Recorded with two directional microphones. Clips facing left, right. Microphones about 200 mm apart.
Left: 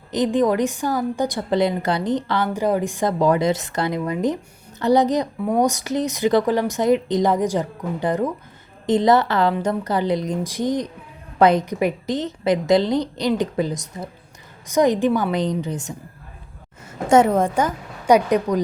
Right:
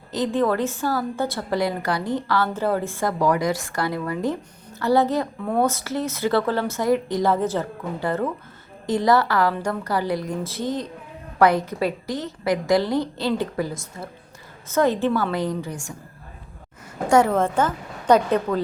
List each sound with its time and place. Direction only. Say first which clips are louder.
0.1 s a woman's voice: left 3 dB; 15° left (ahead or behind)
17.1 s a woman's voice: left 3 dB; 20° left (ahead or behind)